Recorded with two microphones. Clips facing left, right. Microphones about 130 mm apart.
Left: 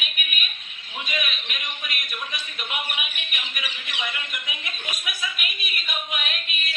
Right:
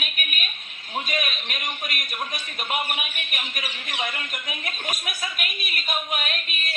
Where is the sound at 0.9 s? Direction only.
40° right (ahead or behind).